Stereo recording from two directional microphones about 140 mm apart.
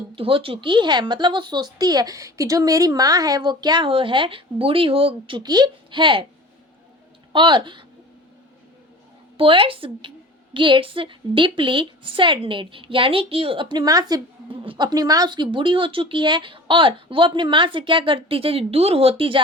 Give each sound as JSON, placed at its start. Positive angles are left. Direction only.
{"t": 0.2, "sound": "speech", "side_deg": -40}
{"t": 7.3, "sound": "speech", "side_deg": -35}
{"t": 9.4, "sound": "speech", "side_deg": -40}